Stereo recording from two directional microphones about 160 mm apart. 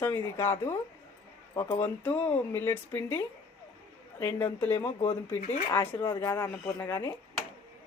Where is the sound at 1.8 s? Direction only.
10° left (ahead or behind).